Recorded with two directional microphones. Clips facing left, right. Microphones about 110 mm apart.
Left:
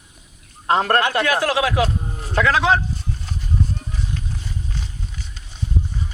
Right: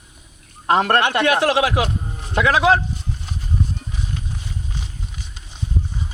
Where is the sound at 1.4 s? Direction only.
25° right (ahead or behind); by 2.8 s 10° right (ahead or behind).